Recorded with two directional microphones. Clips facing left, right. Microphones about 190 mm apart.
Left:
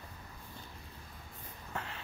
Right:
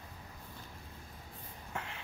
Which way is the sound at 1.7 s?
10° right (ahead or behind).